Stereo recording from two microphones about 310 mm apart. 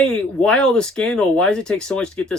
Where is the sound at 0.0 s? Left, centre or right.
Centre.